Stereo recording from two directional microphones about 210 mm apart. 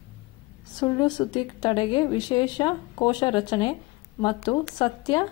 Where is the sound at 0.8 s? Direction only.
20° left (ahead or behind).